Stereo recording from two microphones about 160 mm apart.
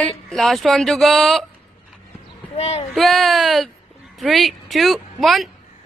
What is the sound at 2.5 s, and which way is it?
Speech, 40° left (ahead or behind).